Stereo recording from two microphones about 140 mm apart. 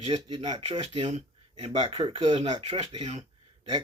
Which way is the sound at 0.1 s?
45° right (ahead or behind).